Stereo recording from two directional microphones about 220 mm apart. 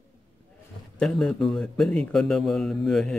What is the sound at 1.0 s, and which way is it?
A man's voice, 5° left (ahead or behind).